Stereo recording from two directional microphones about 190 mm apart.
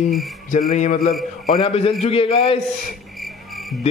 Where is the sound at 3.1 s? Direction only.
Centre (ahead or behind).